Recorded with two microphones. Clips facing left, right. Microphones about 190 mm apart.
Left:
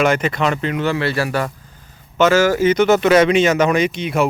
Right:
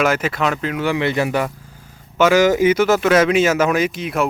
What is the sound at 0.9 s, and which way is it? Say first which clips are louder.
Speech: right 3 dB; 20° right (ahead or behind).